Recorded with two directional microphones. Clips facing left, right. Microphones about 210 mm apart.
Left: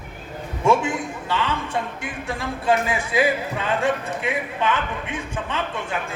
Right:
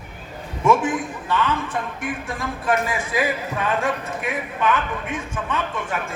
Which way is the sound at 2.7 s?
30° left (ahead or behind).